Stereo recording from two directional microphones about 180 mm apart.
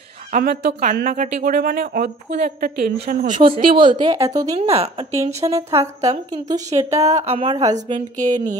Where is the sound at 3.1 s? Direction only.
50° right (ahead or behind).